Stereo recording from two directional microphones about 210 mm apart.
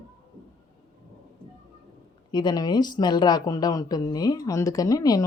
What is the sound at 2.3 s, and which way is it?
Speech, 20° left (ahead or behind).